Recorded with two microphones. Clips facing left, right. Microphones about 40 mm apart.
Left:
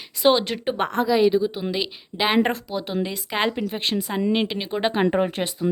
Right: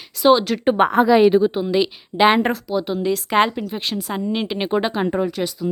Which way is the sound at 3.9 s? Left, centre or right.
Centre.